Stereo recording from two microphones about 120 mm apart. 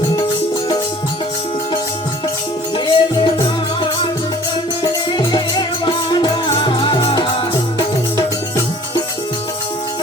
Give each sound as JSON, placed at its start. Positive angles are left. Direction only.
{"t": 2.7, "sound": "music", "side_deg": 40}